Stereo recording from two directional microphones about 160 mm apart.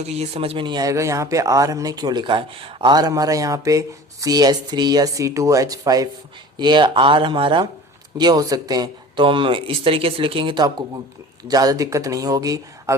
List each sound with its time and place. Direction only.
0.1 s speech: 40° right (ahead or behind); by 13.0 s 20° right (ahead or behind)